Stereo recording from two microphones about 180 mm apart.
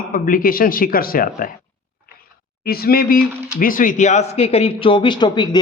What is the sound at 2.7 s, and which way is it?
Speech, 55° left (ahead or behind).